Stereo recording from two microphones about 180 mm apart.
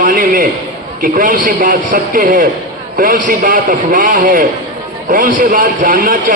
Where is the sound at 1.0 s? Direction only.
50° right (ahead or behind).